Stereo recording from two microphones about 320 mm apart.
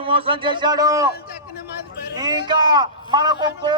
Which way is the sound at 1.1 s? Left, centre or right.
Left.